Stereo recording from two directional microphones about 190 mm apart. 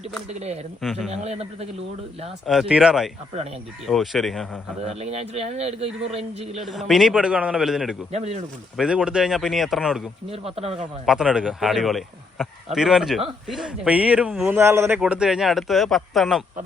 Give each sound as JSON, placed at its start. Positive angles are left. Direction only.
{"t": 0.3, "sound": "a man's voice", "side_deg": -35}
{"t": 0.8, "sound": "speech", "side_deg": 0}
{"t": 1.1, "sound": "a man's voice", "side_deg": -35}
{"t": 2.5, "sound": "speech", "side_deg": -5}
{"t": 4.9, "sound": "a man's voice", "side_deg": -35}
{"t": 6.7, "sound": "speech", "side_deg": 0}
{"t": 8.1, "sound": "a man's voice", "side_deg": -35}
{"t": 8.7, "sound": "speech", "side_deg": -5}
{"t": 10.2, "sound": "a man's voice", "side_deg": -30}
{"t": 11.0, "sound": "speech", "side_deg": -5}